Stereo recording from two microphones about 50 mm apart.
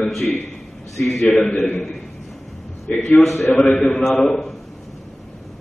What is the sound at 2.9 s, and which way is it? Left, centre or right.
Speech, left.